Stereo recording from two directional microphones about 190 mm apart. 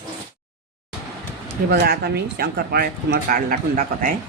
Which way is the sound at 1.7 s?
55° right (ahead or behind).